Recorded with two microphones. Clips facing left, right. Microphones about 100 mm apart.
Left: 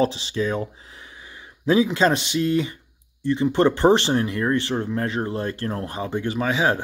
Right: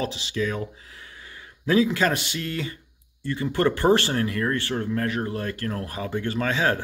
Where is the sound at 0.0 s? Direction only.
30° left (ahead or behind).